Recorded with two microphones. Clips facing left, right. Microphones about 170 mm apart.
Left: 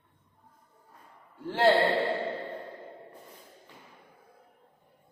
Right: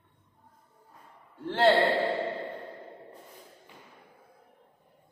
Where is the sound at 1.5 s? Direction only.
Centre (ahead or behind).